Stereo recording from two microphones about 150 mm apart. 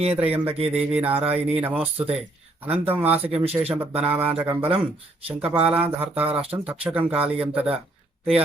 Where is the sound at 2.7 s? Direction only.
15° right (ahead or behind).